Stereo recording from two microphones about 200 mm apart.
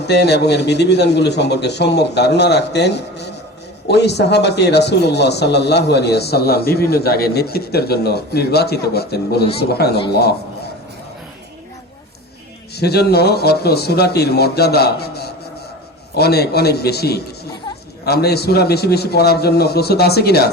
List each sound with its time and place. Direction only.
0.0 s a man's voice: 55° left (ahead or behind)
12.7 s speech: 55° left (ahead or behind)